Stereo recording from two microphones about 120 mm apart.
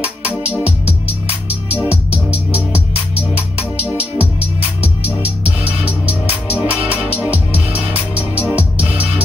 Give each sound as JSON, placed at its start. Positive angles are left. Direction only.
{"t": 1.7, "sound": "music", "side_deg": -15}
{"t": 5.4, "sound": "music", "side_deg": -15}